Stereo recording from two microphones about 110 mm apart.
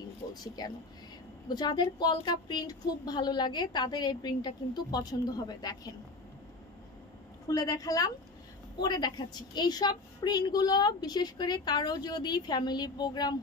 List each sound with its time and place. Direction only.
0.3 s a woman's voice: 35° left (ahead or behind)
7.4 s a woman's voice: 35° left (ahead or behind)